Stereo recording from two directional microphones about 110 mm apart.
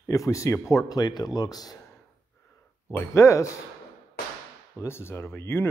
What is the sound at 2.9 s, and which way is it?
Speech, 25° left (ahead or behind).